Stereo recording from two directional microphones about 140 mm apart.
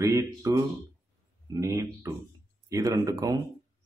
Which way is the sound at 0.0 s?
25° right (ahead or behind).